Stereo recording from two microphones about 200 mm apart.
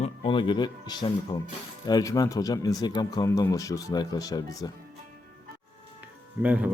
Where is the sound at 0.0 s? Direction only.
25° left (ahead or behind).